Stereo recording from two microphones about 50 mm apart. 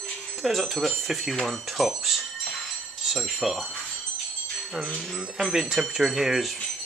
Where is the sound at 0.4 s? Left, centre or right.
Centre.